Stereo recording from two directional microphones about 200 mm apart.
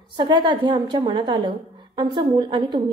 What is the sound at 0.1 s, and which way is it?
A woman's voice, 20° right (ahead or behind).